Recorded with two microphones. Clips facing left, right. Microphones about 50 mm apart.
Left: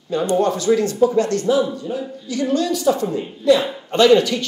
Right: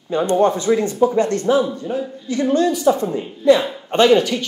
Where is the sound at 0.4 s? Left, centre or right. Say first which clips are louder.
Right 1 dB; right.